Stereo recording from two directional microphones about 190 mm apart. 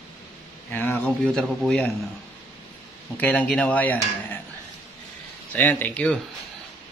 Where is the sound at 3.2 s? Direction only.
10° left (ahead or behind).